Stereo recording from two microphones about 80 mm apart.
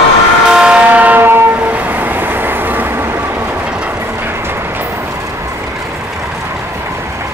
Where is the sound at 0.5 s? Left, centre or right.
Centre; by 1.5 s right.